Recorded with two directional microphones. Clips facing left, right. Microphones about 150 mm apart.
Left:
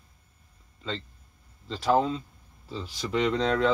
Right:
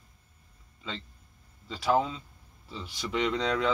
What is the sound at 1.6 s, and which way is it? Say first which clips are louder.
Speech: left 3 dB; 5° right (ahead or behind).